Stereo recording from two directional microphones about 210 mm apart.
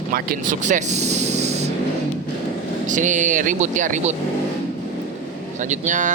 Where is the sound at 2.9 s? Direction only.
35° right (ahead or behind).